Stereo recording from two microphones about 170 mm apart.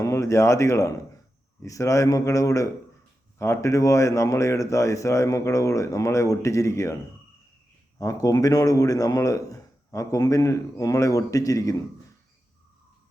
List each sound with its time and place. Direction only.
0.0 s speech: 15° left (ahead or behind)
7.9 s speech: 20° left (ahead or behind)